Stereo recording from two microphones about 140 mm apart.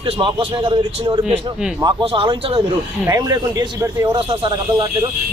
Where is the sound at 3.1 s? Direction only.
25° right (ahead or behind).